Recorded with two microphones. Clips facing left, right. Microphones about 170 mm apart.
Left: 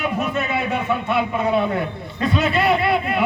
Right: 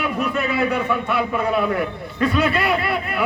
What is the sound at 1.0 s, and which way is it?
Speech, 25° left (ahead or behind).